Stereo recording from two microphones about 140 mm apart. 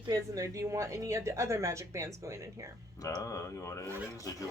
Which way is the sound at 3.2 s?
20° left (ahead or behind).